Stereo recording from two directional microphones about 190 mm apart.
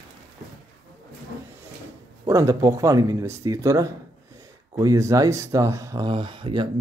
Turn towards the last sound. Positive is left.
turn(degrees=-25)  # may be behind; listen again after turning